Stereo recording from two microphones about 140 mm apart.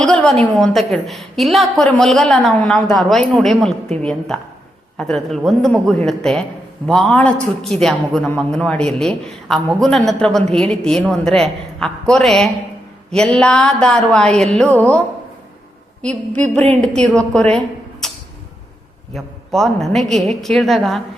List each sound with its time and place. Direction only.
0.0 s a man's voice: 5° left (ahead or behind)
16.3 s a sound: 55° right (ahead or behind)
16.8 s a woman's voice: 5° left (ahead or behind)
19.1 s a man's voice: centre (ahead or behind)